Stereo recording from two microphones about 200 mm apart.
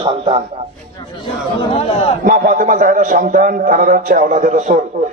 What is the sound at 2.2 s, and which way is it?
A man's voice, 40° right (ahead or behind).